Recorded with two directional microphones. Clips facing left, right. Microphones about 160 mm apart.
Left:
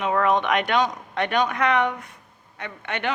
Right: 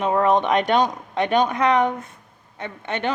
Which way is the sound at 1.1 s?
25° right (ahead or behind).